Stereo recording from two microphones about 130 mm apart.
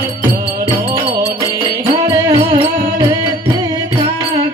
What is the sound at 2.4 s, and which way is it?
Music, 45° right (ahead or behind).